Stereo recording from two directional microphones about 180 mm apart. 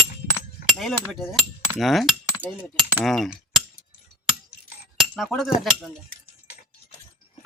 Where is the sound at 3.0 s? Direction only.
Centre (ahead or behind).